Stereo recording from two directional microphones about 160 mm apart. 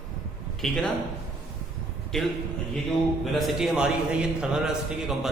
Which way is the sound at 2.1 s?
Centre (ahead or behind).